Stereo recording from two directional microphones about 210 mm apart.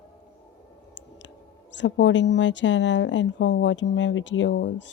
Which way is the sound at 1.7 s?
60° left (ahead or behind).